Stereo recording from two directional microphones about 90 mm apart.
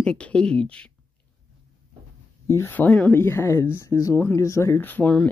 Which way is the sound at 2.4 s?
30° left (ahead or behind).